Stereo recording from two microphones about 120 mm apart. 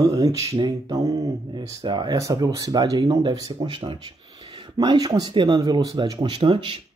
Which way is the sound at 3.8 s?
45° right (ahead or behind).